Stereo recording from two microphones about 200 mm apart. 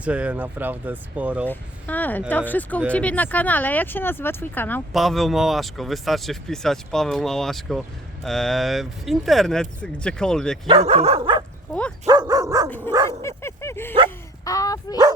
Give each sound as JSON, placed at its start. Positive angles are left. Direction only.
{"t": 0.0, "sound": "speech", "side_deg": -5}
{"t": 1.5, "sound": "speech", "side_deg": 10}
{"t": 10.7, "sound": "dog", "side_deg": -30}
{"t": 11.7, "sound": "speech", "side_deg": 5}
{"t": 12.0, "sound": "speech", "side_deg": -20}
{"t": 12.9, "sound": "dog", "side_deg": -20}
{"t": 13.2, "sound": "dog", "side_deg": 15}
{"t": 14.4, "sound": "speech", "side_deg": 15}